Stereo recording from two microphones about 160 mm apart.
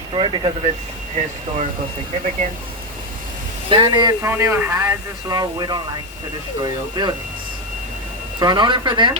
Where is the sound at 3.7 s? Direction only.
30° right (ahead or behind).